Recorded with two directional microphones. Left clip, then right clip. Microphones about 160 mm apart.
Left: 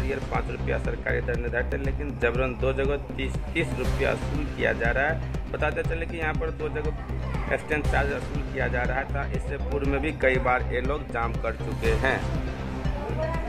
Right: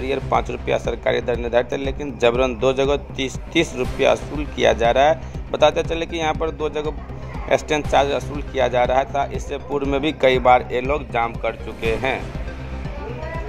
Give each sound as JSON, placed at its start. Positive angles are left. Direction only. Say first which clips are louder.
{"t": 0.1, "sound": "a man's voice", "louder": "right 10 dB", "side_deg": -35}
{"t": 7.4, "sound": "a man's voice", "louder": "right 8 dB", "side_deg": -30}